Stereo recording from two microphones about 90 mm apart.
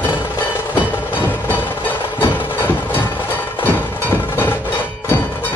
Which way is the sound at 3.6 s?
25° left (ahead or behind).